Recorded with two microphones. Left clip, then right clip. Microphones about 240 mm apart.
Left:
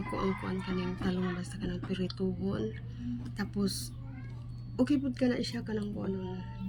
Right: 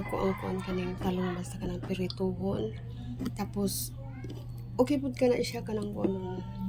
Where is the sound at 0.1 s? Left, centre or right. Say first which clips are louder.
Right 3 dB; centre.